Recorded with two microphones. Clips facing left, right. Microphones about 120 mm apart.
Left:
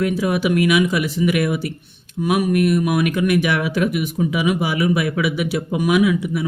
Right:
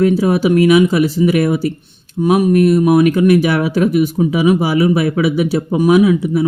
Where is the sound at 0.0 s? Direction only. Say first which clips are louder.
Right 7 dB; 35° right (ahead or behind).